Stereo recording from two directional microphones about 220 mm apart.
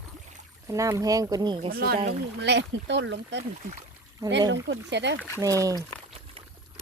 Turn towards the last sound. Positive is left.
turn(degrees=-15)  # may be behind; listen again after turning